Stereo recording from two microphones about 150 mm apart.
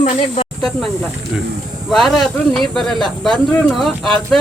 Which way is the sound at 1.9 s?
Centre (ahead or behind).